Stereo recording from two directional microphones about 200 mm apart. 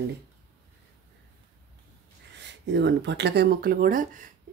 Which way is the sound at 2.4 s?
60° right (ahead or behind).